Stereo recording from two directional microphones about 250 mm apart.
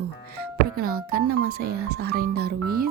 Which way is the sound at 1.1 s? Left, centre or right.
Right.